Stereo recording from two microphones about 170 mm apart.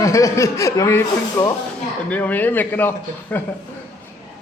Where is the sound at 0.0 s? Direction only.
20° left (ahead or behind).